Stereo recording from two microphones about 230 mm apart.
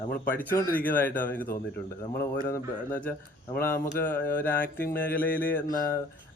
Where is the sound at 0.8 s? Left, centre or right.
Centre.